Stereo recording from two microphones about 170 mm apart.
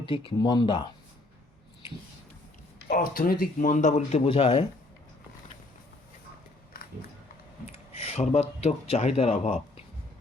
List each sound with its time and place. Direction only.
0.3 s speech: 25° left (ahead or behind)
2.9 s speech: 60° left (ahead or behind); by 4.6 s 35° left (ahead or behind)
7.7 s speech: 40° left (ahead or behind)